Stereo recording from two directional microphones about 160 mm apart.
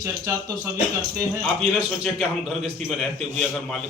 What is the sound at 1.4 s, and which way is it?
A man's voice, centre (ahead or behind).